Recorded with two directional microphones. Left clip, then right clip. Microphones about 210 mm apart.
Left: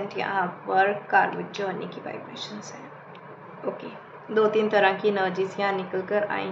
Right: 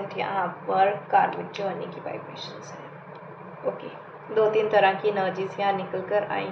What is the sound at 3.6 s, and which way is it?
A woman's voice, 40° left (ahead or behind).